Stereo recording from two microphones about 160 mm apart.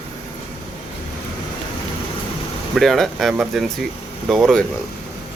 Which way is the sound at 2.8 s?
Centre (ahead or behind).